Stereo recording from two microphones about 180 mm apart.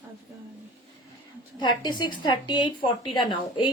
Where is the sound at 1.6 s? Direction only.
25° left (ahead or behind).